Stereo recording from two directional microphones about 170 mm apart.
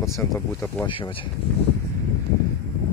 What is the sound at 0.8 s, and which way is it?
Speech, 30° left (ahead or behind).